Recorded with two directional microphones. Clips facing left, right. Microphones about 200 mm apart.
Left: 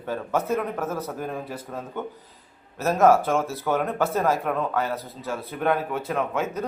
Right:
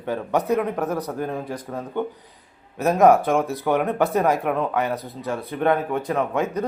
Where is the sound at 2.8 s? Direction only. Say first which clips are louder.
Right 3 dB; 15° right (ahead or behind).